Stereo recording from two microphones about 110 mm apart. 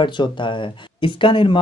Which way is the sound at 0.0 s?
45° left (ahead or behind).